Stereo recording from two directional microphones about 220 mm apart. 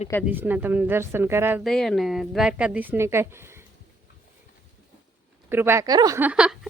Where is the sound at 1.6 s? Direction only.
Centre (ahead or behind).